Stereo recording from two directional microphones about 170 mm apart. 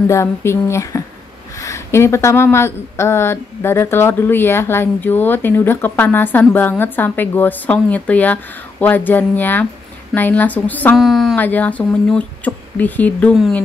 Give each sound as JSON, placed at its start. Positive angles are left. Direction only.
{"t": 0.1, "sound": "speech", "side_deg": 15}